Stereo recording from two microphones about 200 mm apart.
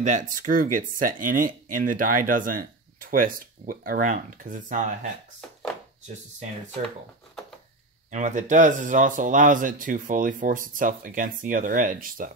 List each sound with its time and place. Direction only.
0.0 s speech: 40° right (ahead or behind)
8.1 s speech: 40° right (ahead or behind)